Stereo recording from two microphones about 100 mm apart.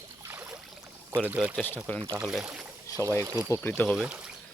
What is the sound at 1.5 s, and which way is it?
Speech, 20° left (ahead or behind).